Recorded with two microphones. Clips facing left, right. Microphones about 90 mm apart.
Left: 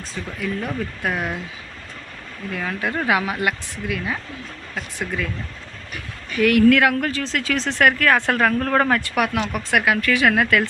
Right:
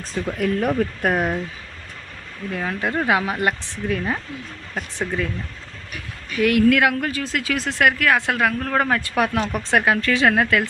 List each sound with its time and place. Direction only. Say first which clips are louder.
0.3 s speech: right 5 dB; 55° right (ahead or behind)
2.5 s speech: right 1 dB; 25° right (ahead or behind)
4.9 s speech: right 2 dB; 25° right (ahead or behind)
6.4 s speech: left 2 dB; 20° right (ahead or behind); by 8.9 s 5° right (ahead or behind)
9.1 s speech: right 1 dB; 30° right (ahead or behind)